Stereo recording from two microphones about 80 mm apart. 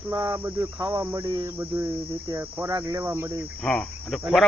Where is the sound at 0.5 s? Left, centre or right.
Right.